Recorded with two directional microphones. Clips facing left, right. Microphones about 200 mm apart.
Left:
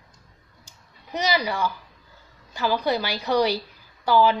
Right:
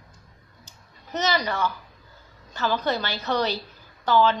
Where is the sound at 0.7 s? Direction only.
10° left (ahead or behind).